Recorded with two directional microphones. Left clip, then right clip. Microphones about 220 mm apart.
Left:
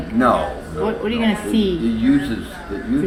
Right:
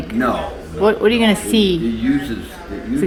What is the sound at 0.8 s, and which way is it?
Speech, 40° right (ahead or behind).